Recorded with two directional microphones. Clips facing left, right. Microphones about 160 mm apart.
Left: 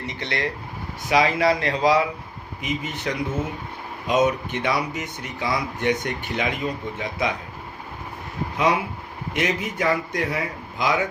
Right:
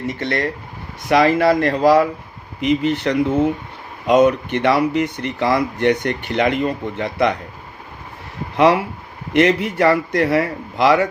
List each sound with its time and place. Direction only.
0.1 s speech: 50° right (ahead or behind)
8.5 s speech: 65° right (ahead or behind)